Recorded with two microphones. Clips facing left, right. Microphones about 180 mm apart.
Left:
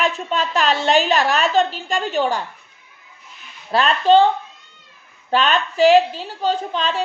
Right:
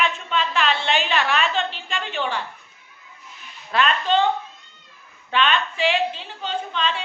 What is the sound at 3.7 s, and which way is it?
Speech, 35° left (ahead or behind).